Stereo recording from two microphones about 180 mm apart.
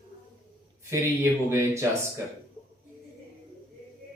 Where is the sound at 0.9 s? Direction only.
15° right (ahead or behind).